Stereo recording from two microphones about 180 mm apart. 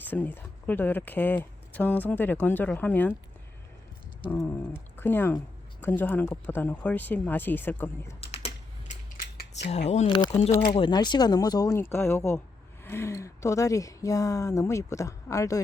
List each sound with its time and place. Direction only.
0.1 s speech: 10° left (ahead or behind)
4.3 s speech: 10° left (ahead or behind)
8.2 s typing: 35° left (ahead or behind)
10.1 s speech: 25° left (ahead or behind)